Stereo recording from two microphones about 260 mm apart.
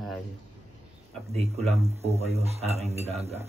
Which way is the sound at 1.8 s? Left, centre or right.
Right.